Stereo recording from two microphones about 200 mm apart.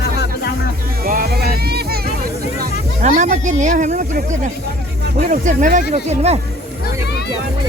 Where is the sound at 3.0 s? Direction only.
35° right (ahead or behind).